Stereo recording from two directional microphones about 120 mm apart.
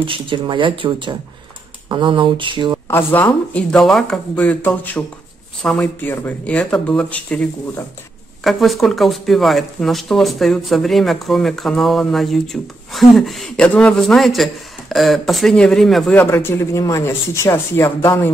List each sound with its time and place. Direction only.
0.0 s speech: 45° right (ahead or behind)
2.9 s speech: 20° left (ahead or behind)
3.7 s speech: 5° left (ahead or behind)
5.6 s speech: 5° left (ahead or behind)
5.9 s speech: 15° left (ahead or behind)
8.5 s speech: centre (ahead or behind)
16.2 s speech: 15° left (ahead or behind)